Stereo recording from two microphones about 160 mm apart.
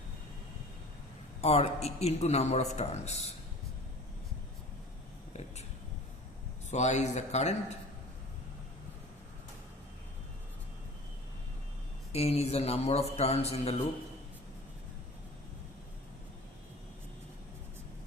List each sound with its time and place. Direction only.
1.4 s a man's voice: 40° left (ahead or behind)
6.7 s speech: 45° left (ahead or behind)
12.1 s a man's voice: 40° left (ahead or behind)